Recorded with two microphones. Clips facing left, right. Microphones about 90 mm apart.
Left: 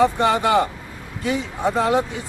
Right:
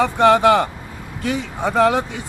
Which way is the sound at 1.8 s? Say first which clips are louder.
Right 4 dB; 75° right (ahead or behind).